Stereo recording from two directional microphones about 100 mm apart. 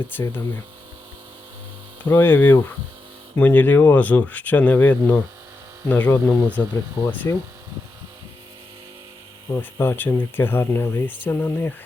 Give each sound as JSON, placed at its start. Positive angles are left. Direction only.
{"t": 0.1, "sound": "speech", "side_deg": 20}
{"t": 2.0, "sound": "speech", "side_deg": 20}
{"t": 7.0, "sound": "speech", "side_deg": 45}
{"t": 9.6, "sound": "speech", "side_deg": 25}